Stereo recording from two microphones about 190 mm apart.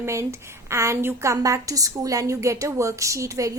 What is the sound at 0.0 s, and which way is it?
A woman's voice, 15° right (ahead or behind).